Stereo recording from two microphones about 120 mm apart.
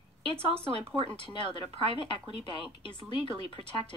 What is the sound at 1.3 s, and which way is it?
Speech, 45° left (ahead or behind).